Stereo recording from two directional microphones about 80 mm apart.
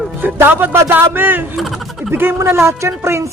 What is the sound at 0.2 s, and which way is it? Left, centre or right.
A man's voice, right.